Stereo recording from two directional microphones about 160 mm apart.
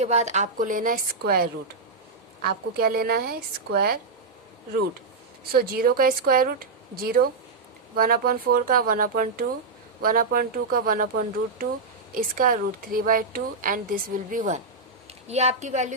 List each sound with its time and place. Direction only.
0.0 s speech: 45° right (ahead or behind); by 3.9 s 70° right (ahead or behind)
5.5 s speech: 65° right (ahead or behind)
12.1 s a woman's voice: 65° right (ahead or behind); by 15.9 s 45° right (ahead or behind)